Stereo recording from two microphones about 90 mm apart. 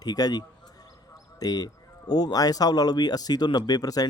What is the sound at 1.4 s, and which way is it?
Speech, 45° left (ahead or behind).